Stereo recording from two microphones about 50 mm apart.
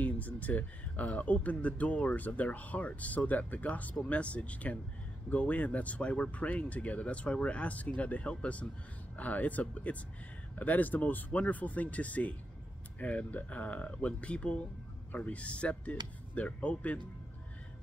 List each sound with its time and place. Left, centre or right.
0.0 s speech: left